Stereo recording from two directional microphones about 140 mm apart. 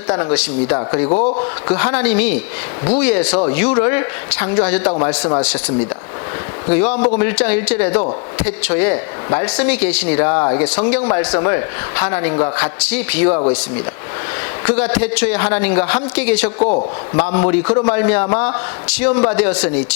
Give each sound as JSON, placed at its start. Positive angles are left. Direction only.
{"t": 0.1, "sound": "speech", "side_deg": 20}
{"t": 1.0, "sound": "a man's voice", "side_deg": 40}
{"t": 1.7, "sound": "speech", "side_deg": 10}
{"t": 10.6, "sound": "speech", "side_deg": 10}
{"t": 14.6, "sound": "speech", "side_deg": 10}
{"t": 16.6, "sound": "a man's voice", "side_deg": 40}
{"t": 17.2, "sound": "speech", "side_deg": 15}